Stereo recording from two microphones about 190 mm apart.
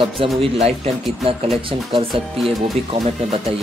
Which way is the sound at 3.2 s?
35° right (ahead or behind).